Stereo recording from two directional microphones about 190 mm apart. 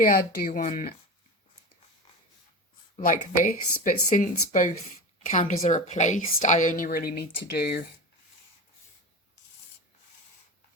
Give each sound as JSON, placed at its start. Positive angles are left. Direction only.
{"t": 0.0, "sound": "speech", "side_deg": 45}
{"t": 3.0, "sound": "a woman's voice", "side_deg": 45}